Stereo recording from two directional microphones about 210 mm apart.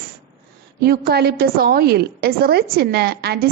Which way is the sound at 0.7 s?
45° right (ahead or behind).